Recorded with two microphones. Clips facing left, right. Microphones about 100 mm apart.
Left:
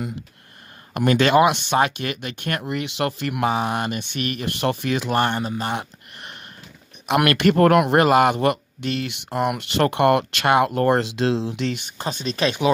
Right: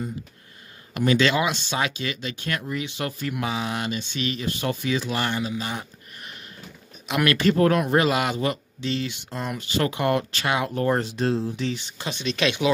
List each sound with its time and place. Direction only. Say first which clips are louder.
0.9 s speech: left 5 dB; 50° left (ahead or behind); by 11.9 s 70° left (ahead or behind)
12.0 s speech: left 2 dB; 40° left (ahead or behind)